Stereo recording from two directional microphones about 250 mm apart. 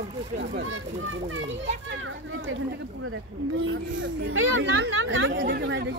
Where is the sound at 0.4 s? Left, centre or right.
Right.